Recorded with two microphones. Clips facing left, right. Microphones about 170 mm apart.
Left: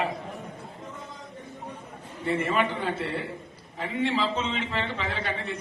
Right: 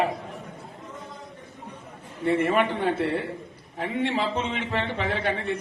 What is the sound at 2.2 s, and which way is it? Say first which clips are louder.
A man's voice: right 4 dB; 55° right (ahead or behind).